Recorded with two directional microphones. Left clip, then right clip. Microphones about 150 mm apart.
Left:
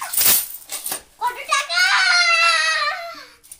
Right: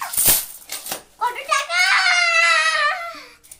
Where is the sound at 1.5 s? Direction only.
5° right (ahead or behind).